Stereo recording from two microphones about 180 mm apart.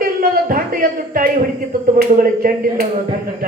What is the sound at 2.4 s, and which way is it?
Speech, 50° right (ahead or behind).